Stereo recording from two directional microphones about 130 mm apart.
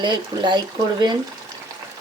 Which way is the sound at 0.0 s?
35° right (ahead or behind).